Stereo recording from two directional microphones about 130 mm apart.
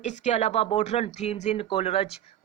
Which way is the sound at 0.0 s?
65° left (ahead or behind).